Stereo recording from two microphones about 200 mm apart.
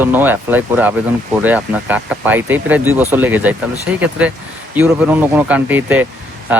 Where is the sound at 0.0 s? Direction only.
10° right (ahead or behind).